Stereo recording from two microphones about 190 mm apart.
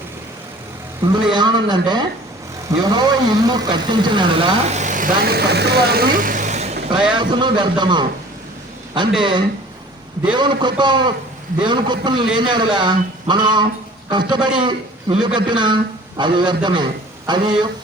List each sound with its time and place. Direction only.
1.1 s a man's voice: 25° right (ahead or behind)
6.9 s speech: 5° right (ahead or behind)
7.2 s a man's voice: 25° right (ahead or behind)
10.3 s a man's voice: 25° right (ahead or behind)